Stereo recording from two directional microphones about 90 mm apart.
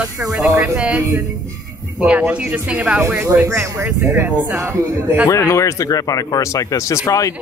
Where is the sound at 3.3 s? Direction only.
35° right (ahead or behind).